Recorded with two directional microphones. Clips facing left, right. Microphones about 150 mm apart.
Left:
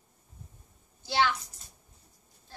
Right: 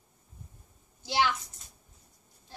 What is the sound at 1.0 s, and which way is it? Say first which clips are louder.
Speech: left 1 dB; 15° right (ahead or behind).